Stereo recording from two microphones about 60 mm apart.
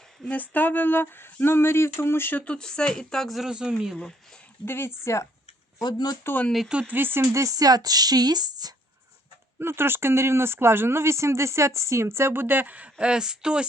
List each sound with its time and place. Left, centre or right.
0.3 s a sound: left
2.6 s speech: centre
3.4 s speech: centre
4.6 s speech: left
6.3 s a sound: left
6.7 s speech: right
6.9 s speech: right
7.2 s speech: right
9.6 s speech: right; by 13.7 s centre